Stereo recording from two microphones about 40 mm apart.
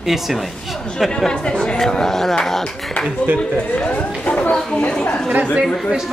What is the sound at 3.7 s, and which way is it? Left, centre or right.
Speech, left.